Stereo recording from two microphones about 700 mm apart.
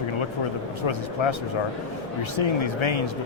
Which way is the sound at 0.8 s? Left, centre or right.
Left.